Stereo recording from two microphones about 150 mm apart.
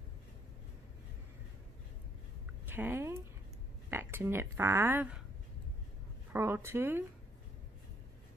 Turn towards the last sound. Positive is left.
turn(degrees=-15)  # may be behind; listen again after turning